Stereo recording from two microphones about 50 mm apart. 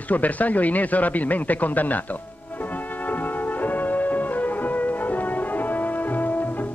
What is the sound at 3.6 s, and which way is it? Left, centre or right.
Music, left.